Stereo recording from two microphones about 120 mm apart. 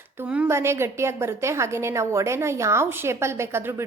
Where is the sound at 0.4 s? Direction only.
20° right (ahead or behind).